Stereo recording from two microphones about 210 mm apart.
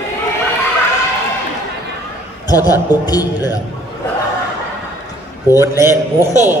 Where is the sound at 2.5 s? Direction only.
15° left (ahead or behind).